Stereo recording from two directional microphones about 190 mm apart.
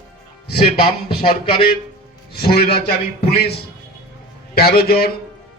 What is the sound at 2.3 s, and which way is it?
A man's voice, 55° left (ahead or behind).